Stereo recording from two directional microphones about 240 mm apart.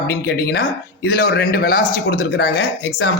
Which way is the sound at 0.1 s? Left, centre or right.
Left.